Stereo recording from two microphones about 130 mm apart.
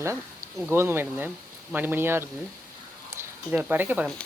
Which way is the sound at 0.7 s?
15° right (ahead or behind).